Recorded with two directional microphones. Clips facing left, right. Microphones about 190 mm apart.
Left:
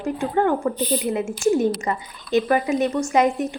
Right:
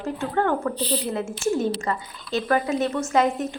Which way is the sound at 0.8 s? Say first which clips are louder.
Left 3 dB; 35° right (ahead or behind).